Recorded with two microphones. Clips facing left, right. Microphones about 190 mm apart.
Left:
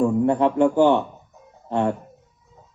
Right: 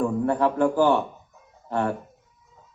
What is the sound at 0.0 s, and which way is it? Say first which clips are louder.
A man's voice: left 4 dB; 20° left (ahead or behind).